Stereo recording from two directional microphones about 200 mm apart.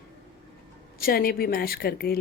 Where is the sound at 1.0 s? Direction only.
50° left (ahead or behind).